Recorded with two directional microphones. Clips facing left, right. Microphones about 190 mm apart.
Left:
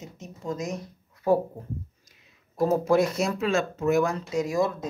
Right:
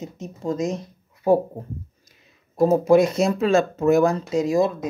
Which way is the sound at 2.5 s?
20° right (ahead or behind).